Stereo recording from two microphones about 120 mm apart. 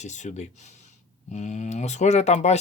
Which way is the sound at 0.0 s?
80° left.